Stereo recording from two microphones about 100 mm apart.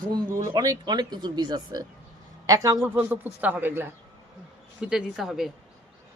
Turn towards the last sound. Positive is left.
turn(degrees=-5)  # may be behind; listen again after turning